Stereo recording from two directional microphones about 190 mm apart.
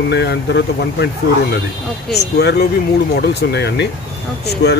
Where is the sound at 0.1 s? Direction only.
65° left (ahead or behind).